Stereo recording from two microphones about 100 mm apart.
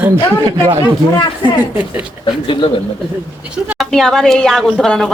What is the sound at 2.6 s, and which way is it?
Speech, 70° left (ahead or behind).